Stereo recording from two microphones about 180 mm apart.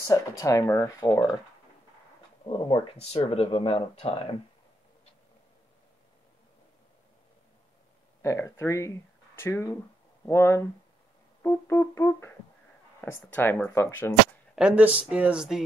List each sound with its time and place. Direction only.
0.1 s speech: 20° left (ahead or behind)
2.4 s speech: 25° left (ahead or behind)
8.2 s speech: 15° left (ahead or behind)
14.5 s speech: 5° right (ahead or behind)